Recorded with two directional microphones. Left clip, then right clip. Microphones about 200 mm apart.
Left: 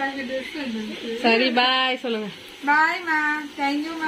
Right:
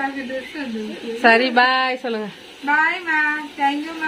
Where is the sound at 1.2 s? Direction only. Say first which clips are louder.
Right 5 dB; 20° right (ahead or behind).